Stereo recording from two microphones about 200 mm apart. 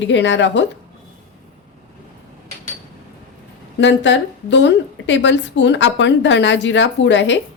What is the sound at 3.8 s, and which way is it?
A woman's voice, 65° left (ahead or behind).